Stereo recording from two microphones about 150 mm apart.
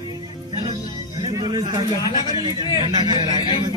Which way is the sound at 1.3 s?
30° right (ahead or behind).